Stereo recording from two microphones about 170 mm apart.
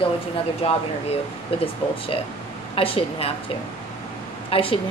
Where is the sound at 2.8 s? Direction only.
35° left (ahead or behind).